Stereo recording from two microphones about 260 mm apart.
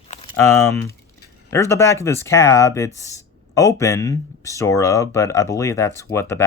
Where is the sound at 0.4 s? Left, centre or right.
Centre.